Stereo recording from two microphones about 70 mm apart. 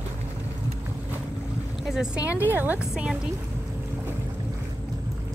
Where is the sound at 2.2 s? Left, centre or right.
Right.